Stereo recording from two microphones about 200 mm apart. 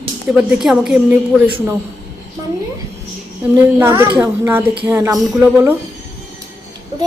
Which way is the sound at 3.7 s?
10° right (ahead or behind).